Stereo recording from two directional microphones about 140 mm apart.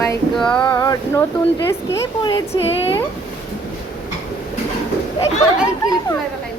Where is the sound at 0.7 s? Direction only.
25° left (ahead or behind); by 2.9 s 45° left (ahead or behind).